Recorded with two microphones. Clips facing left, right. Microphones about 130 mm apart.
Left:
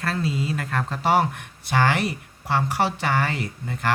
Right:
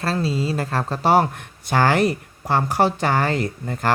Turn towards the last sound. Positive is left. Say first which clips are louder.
# right 5 dB
turn(degrees=-40)  # may be behind; listen again after turning